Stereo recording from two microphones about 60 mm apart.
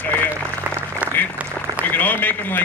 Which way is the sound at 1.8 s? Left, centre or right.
Left.